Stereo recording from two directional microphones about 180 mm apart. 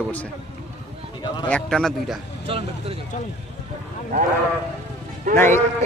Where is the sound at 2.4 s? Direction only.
30° right (ahead or behind).